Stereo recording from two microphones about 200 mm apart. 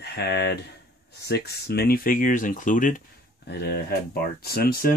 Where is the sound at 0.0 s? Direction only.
55° left (ahead or behind).